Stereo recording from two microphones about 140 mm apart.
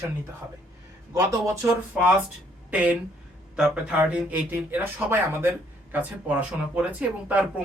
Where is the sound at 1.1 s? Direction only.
25° right (ahead or behind).